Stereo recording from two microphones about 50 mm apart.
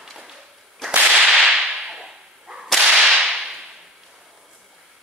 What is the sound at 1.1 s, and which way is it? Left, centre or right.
Whip, centre.